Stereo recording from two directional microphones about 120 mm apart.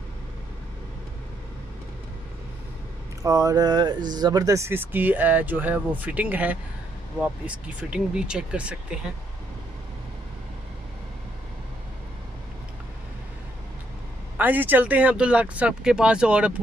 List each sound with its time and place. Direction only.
3.2 s speech: 30° right (ahead or behind); by 9.0 s 10° right (ahead or behind)
14.3 s speech: 15° right (ahead or behind)